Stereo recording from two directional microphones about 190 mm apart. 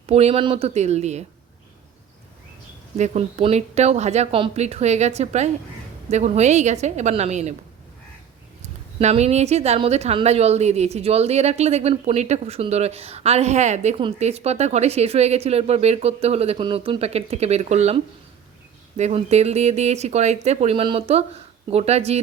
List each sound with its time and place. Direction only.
0.0 s speech: 35° right (ahead or behind)
3.0 s speech: 35° right (ahead or behind)
9.0 s speech: 35° right (ahead or behind)